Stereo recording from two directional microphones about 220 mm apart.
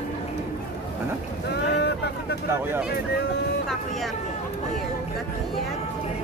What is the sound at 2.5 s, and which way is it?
Speech, 10° right (ahead or behind).